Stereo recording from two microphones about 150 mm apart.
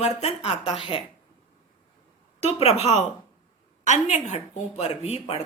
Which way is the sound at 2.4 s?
40° left (ahead or behind).